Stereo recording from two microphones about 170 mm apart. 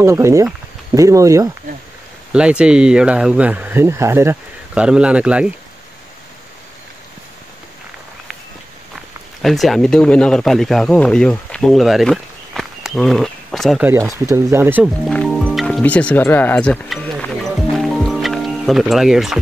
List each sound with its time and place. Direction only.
0.0 s speech: 15° right (ahead or behind)
2.3 s speech: 5° right (ahead or behind)
9.4 s speech: centre (ahead or behind)
13.8 s speech: 15° right (ahead or behind)
15.0 s music: centre (ahead or behind)